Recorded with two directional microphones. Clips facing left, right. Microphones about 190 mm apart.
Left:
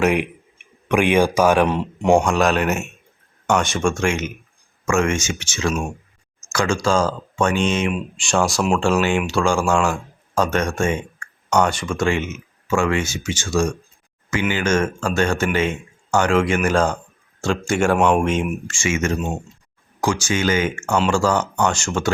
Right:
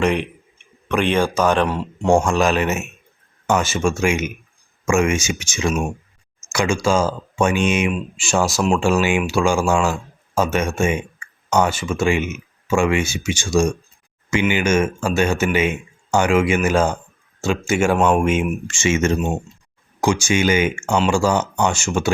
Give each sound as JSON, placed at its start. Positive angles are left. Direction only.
{"t": 0.0, "sound": "speech", "side_deg": 10}
{"t": 2.2, "sound": "speech", "side_deg": 0}
{"t": 18.7, "sound": "speech", "side_deg": -25}
{"t": 20.2, "sound": "speech", "side_deg": -15}